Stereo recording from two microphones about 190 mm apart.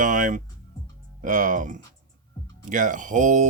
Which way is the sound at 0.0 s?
45° right (ahead or behind).